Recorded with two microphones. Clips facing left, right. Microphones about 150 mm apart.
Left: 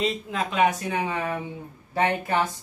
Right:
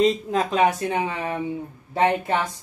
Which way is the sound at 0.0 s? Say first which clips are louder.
Right 7 dB; 40° right (ahead or behind).